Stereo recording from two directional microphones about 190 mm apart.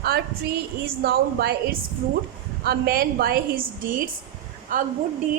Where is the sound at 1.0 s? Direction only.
55° right (ahead or behind).